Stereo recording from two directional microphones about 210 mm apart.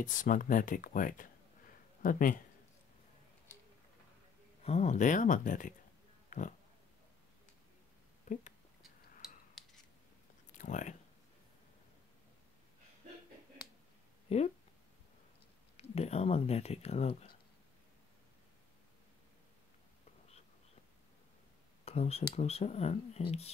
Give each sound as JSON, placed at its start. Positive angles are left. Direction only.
{"t": 0.0, "sound": "speech", "side_deg": 40}
{"t": 4.6, "sound": "speech", "side_deg": 35}
{"t": 6.3, "sound": "pig", "side_deg": 35}
{"t": 8.3, "sound": "speech", "side_deg": 35}
{"t": 9.6, "sound": "scissors", "side_deg": 0}
{"t": 10.6, "sound": "speech", "side_deg": 35}
{"t": 14.3, "sound": "speech", "side_deg": 30}
{"t": 15.7, "sound": "speech", "side_deg": 30}
{"t": 21.8, "sound": "speech", "side_deg": 30}